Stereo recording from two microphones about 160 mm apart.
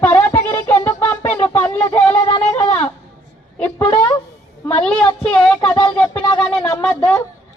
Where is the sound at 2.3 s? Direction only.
35° left (ahead or behind).